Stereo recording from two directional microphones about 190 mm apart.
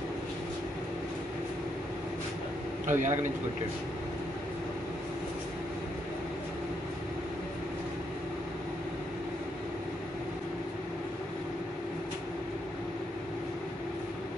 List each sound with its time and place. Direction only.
2.9 s a man's voice: 40° right (ahead or behind)